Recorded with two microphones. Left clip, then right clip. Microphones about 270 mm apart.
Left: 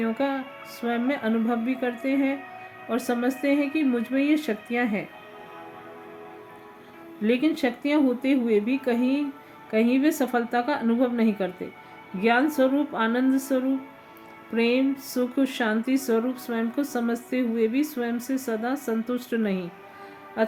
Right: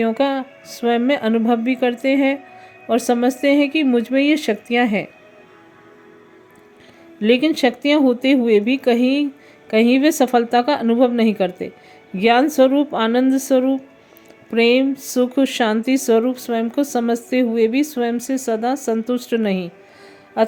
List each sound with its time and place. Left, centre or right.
0.0 s speech: right
7.2 s speech: right